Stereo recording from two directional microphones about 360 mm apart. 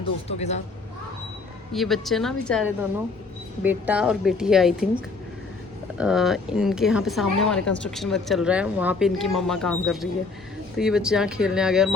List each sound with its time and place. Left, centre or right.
0.3 s speech: centre
1.7 s speech: centre